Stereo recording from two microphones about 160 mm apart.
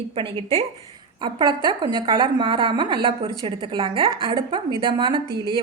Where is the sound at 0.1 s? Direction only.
35° right (ahead or behind).